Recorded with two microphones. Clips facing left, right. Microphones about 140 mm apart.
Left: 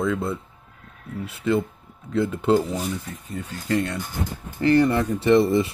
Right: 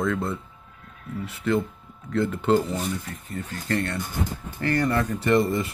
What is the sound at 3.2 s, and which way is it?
Speech, 15° left (ahead or behind).